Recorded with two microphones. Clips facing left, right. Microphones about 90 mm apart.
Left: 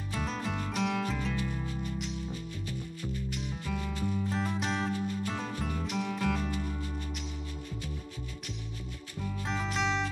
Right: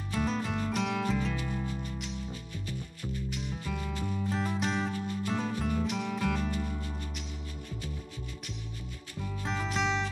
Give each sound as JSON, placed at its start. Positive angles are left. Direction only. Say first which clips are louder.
{"t": 0.1, "sound": "music", "louder": "right 3 dB", "side_deg": 0}
{"t": 3.3, "sound": "music", "louder": "even", "side_deg": 0}
{"t": 9.2, "sound": "music", "louder": "even", "side_deg": 0}